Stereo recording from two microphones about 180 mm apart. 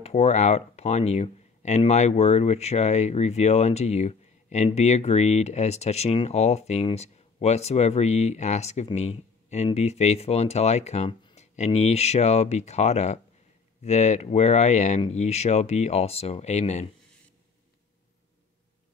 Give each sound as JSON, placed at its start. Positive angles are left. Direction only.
{"t": 0.0, "sound": "speech", "side_deg": 35}